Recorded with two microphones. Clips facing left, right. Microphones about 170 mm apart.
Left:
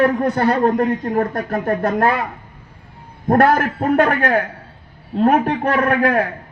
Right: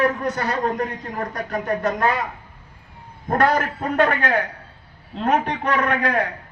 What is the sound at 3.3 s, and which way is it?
A man's voice, 50° left (ahead or behind).